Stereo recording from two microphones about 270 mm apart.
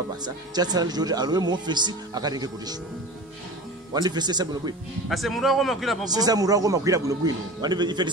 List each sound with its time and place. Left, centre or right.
0.2 s speech: centre
3.9 s speech: centre
5.1 s a man's voice: centre
6.0 s speech: centre